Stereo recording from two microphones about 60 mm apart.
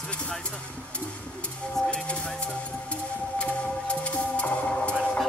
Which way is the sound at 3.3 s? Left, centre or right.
Centre.